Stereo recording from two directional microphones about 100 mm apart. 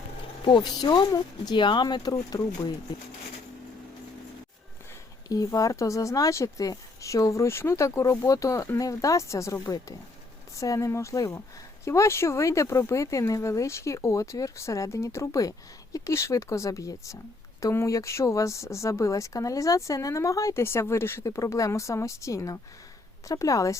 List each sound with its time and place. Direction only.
0.4 s speech: 50° left (ahead or behind)
5.3 s speech: 35° left (ahead or behind)